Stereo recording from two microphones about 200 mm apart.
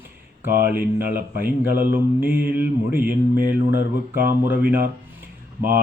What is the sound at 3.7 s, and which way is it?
Speech, 45° right (ahead or behind).